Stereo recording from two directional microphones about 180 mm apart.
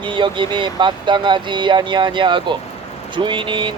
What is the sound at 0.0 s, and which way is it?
Speech, 25° right (ahead or behind).